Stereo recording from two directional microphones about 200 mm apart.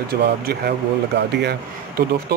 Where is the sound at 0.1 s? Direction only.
55° right (ahead or behind).